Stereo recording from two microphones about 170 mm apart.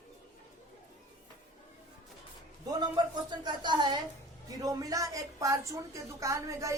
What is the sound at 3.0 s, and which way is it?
A woman's voice, 25° right (ahead or behind).